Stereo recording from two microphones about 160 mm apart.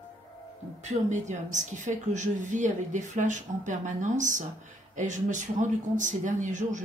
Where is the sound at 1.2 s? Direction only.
50° right (ahead or behind).